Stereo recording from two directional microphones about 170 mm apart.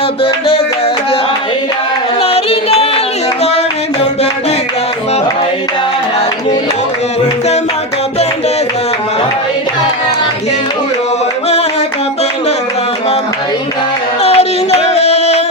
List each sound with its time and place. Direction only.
0.2 s music: 35° left (ahead or behind)
2.2 s music: 35° left (ahead or behind)
14.2 s music: 35° left (ahead or behind)